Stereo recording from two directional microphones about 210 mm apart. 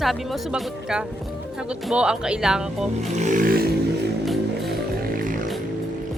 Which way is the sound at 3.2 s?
35° right (ahead or behind).